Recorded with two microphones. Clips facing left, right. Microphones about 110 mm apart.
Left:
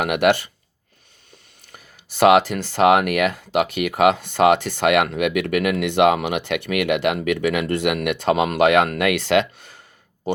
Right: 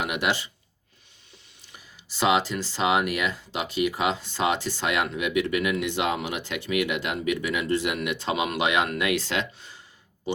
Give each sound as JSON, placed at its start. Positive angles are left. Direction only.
{"t": 0.0, "sound": "speech", "side_deg": 60}
{"t": 1.6, "sound": "speech", "side_deg": 55}